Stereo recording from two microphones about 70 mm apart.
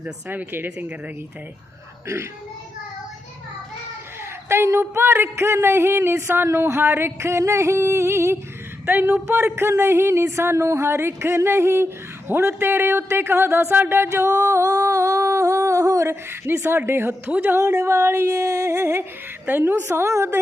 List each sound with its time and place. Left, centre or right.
0.0 s speech: right
4.4 s speech: right
8.9 s speech: right
9.3 s speech: right
19.8 s a woman's voice: right